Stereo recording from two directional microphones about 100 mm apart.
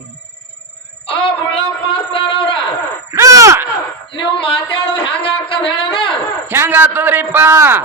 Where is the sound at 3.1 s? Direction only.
35° right (ahead or behind).